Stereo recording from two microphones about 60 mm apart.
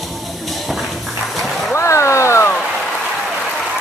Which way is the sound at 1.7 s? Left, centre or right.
Left.